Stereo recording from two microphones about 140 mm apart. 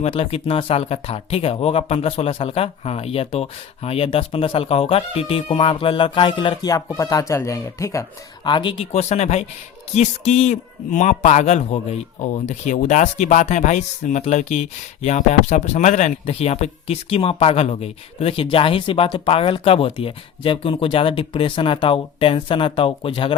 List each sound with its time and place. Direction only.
0.0 s speech: 45° left (ahead or behind)
6.6 s speech: 25° left (ahead or behind)
8.4 s speech: 35° left (ahead or behind)
8.9 s speech: 50° left (ahead or behind)